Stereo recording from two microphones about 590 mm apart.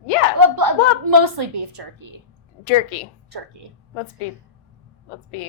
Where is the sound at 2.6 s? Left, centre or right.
Left.